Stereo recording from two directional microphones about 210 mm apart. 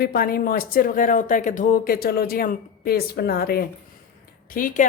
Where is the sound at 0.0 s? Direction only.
45° left (ahead or behind).